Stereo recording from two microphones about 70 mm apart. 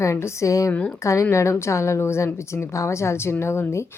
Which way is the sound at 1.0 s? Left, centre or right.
Left.